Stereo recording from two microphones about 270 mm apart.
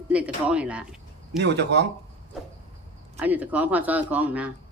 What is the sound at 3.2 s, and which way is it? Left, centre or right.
Speech, centre.